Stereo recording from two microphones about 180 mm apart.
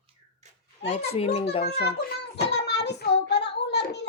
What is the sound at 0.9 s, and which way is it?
Speech, 35° left (ahead or behind).